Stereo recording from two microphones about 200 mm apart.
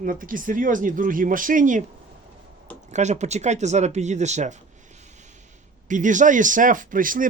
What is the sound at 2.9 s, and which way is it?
Speech, 35° right (ahead or behind).